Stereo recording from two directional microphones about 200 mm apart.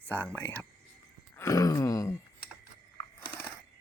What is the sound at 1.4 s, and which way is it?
Groan, 15° left (ahead or behind).